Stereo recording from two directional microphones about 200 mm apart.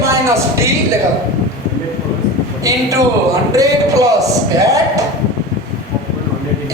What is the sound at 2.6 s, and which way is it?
Speech, 15° right (ahead or behind).